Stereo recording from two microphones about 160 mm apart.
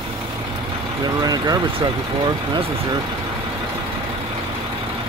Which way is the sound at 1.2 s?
25° right (ahead or behind).